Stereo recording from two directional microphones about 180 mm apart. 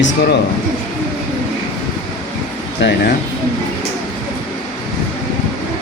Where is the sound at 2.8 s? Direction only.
80° left.